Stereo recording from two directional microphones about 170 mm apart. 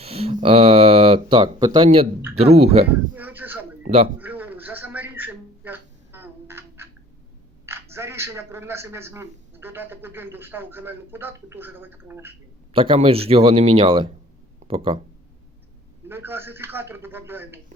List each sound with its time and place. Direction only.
0.0 s speech: 35° right (ahead or behind)
3.2 s speech: 10° right (ahead or behind)
3.8 s speech: 40° right (ahead or behind)
4.2 s a sound: 10° right (ahead or behind)
7.7 s speech: 15° right (ahead or behind)
12.7 s speech: 35° right (ahead or behind)
14.6 s a sound: 40° right (ahead or behind)
16.0 s speech: 15° right (ahead or behind)